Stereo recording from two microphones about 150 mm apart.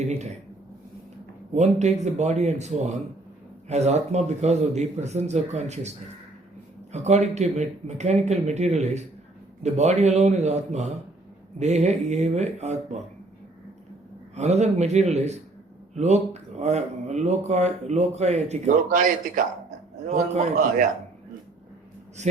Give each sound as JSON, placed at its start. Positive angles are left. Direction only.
{"t": 0.0, "sound": "a sound", "side_deg": -50}
{"t": 1.5, "sound": "speech", "side_deg": -50}
{"t": 6.9, "sound": "speech", "side_deg": -50}
{"t": 14.3, "sound": "speech", "side_deg": -50}
{"t": 18.9, "sound": "a man's voice", "side_deg": -65}
{"t": 20.3, "sound": "speech", "side_deg": -50}